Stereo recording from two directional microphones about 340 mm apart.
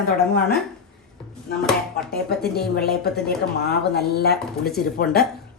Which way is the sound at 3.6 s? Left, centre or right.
Left.